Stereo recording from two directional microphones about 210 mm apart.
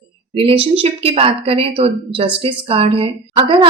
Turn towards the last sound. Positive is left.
turn(degrees=-25)  # may be behind; listen again after turning